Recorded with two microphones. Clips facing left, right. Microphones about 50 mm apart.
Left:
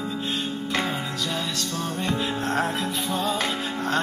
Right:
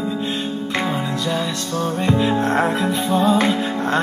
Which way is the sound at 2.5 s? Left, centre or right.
Right.